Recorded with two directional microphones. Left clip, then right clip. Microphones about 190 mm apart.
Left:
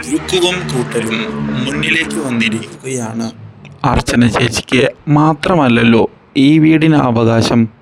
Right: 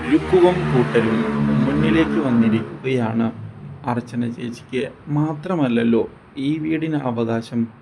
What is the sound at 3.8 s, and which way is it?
Speech, 60° left (ahead or behind).